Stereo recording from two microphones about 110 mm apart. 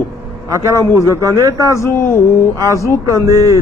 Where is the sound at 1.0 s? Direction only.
30° right (ahead or behind).